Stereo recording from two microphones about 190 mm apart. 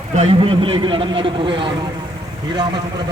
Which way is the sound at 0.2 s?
30° right (ahead or behind).